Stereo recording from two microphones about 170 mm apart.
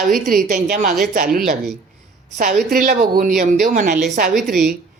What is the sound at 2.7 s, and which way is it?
A woman's voice, 55° right (ahead or behind).